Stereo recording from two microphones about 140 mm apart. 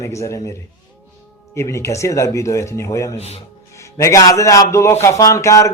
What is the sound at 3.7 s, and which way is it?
A man's voice, 20° left (ahead or behind).